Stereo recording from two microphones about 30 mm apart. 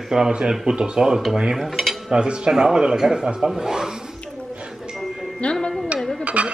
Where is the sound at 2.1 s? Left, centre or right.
Right.